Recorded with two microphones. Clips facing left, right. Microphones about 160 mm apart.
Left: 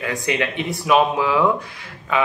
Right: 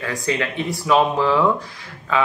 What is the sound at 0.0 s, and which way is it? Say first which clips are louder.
Speech: left 1 dB; 20° left (ahead or behind).